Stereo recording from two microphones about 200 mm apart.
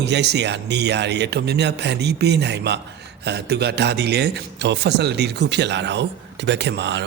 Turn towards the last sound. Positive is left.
turn(degrees=-60)  # may be behind; listen again after turning